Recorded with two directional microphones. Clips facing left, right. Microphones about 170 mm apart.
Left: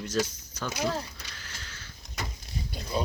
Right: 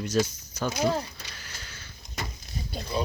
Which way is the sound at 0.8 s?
25° right (ahead or behind).